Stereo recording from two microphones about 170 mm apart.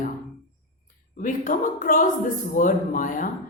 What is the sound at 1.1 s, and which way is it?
A woman's voice, 50° left (ahead or behind).